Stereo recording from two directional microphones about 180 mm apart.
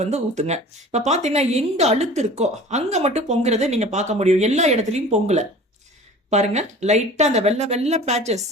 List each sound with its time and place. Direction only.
0.0 s speech: 40° right (ahead or behind)